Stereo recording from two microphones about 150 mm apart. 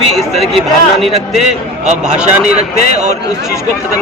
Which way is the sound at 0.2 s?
Centre (ahead or behind).